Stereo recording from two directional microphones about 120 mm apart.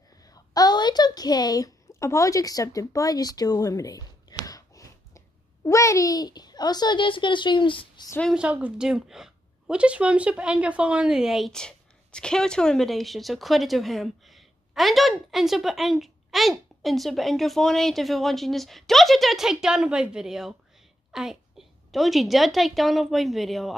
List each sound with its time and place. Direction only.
0.2 s a woman's voice: 30° left (ahead or behind)
8.4 s a woman's voice: 10° right (ahead or behind)